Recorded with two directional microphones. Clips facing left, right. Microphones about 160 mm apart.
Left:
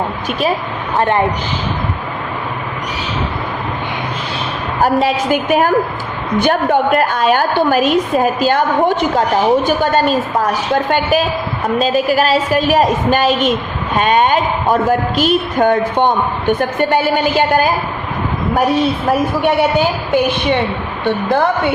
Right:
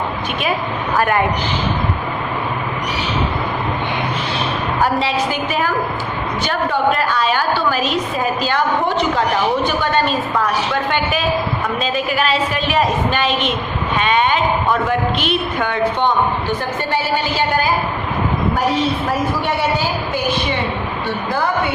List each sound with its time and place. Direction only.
0.9 s a woman's voice: 25° left (ahead or behind)
4.8 s a woman's voice: 45° left (ahead or behind)
20.1 s a woman's voice: 20° left (ahead or behind)